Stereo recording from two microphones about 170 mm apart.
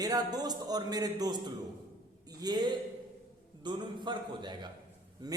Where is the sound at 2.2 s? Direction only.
25° right (ahead or behind).